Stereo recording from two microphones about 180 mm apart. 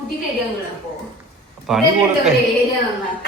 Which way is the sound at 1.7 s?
Centre (ahead or behind).